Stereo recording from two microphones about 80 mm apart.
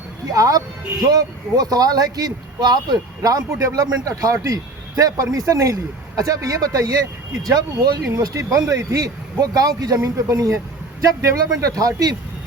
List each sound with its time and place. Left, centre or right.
0.3 s speech: right